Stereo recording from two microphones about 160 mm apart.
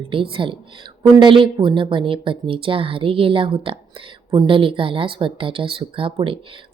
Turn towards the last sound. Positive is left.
turn(degrees=-35)  # may be behind; listen again after turning